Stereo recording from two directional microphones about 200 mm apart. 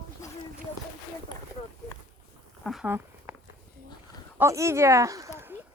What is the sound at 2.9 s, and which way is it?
Walk, 10° right (ahead or behind).